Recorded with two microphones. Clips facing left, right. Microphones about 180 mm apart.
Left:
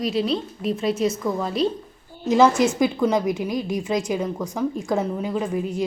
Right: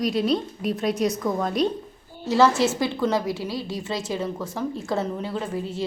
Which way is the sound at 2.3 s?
20° left (ahead or behind).